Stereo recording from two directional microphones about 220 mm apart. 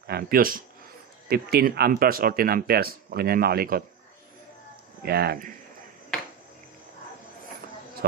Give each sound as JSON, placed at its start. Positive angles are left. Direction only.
{"t": 0.0, "sound": "speech", "side_deg": -45}
{"t": 5.0, "sound": "speech", "side_deg": -45}